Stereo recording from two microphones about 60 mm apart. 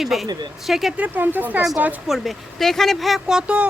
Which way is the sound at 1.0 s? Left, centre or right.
Right.